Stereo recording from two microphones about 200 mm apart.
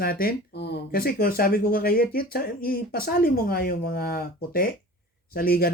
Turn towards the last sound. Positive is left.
turn(degrees=45)  # may be behind; listen again after turning